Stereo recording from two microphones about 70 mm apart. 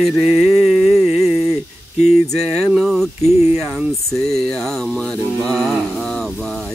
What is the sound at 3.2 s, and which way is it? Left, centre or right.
Speech, right.